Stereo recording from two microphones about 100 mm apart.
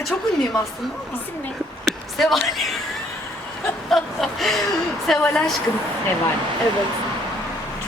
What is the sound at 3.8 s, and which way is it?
Snicker, centre (ahead or behind).